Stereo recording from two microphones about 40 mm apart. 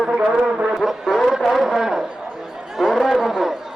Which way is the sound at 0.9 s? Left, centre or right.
Centre.